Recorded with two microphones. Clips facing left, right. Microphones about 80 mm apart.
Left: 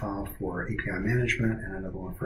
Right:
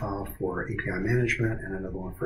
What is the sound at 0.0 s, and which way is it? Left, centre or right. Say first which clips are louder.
Speech: right 2 dB; centre.